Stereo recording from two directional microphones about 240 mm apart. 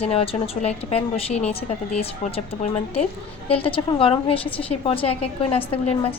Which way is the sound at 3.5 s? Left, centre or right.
Left.